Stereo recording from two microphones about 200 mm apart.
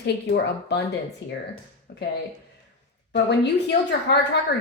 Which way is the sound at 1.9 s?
55° left (ahead or behind).